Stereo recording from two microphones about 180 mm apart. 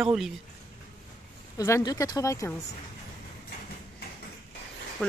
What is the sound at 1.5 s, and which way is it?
Speech, 15° left (ahead or behind).